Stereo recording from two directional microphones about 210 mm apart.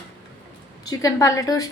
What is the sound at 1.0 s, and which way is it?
Speech, 15° left (ahead or behind).